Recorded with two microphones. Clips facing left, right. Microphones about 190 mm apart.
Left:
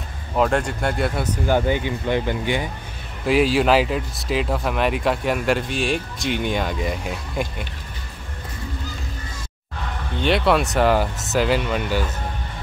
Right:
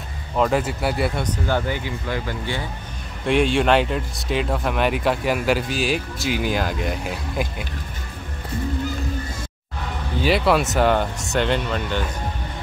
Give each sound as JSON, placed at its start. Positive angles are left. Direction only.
{"t": 0.4, "sound": "speech", "side_deg": -5}
{"t": 1.2, "sound": "speech", "side_deg": 10}
{"t": 1.7, "sound": "speech", "side_deg": 20}
{"t": 3.3, "sound": "speech", "side_deg": 5}
{"t": 10.2, "sound": "speech", "side_deg": 0}